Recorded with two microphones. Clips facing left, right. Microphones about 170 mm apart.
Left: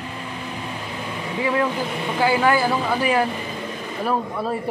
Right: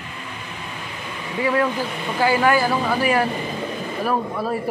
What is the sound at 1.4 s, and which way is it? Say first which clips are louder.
A woman's voice: right 2 dB; 5° left (ahead or behind).